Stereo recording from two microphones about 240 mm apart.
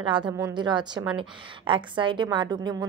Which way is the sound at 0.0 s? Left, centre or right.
Centre.